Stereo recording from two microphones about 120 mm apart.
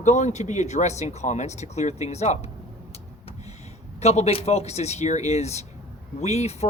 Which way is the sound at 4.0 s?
65° left (ahead or behind).